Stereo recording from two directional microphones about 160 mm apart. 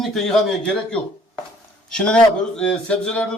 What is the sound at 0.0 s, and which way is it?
Speech, centre (ahead or behind).